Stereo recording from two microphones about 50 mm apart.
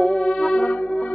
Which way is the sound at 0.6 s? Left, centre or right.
Left.